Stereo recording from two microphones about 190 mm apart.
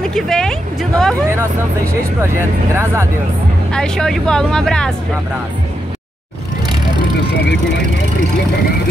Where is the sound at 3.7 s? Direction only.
5° left (ahead or behind).